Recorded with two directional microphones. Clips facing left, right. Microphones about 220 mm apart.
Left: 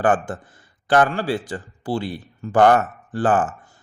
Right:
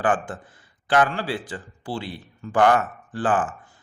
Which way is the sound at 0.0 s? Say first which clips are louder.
Left 4 dB; 45° left (ahead or behind).